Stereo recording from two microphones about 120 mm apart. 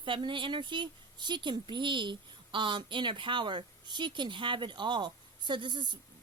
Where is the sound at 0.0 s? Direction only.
45° right (ahead or behind).